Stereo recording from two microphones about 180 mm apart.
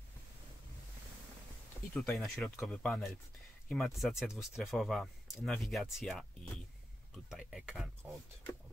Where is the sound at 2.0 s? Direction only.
Centre (ahead or behind).